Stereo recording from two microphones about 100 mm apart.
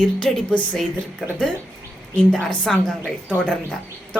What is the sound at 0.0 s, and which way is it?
Speech, 5° left (ahead or behind).